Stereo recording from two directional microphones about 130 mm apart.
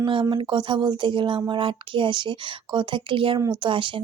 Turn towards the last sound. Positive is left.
turn(degrees=-40)  # may be behind; listen again after turning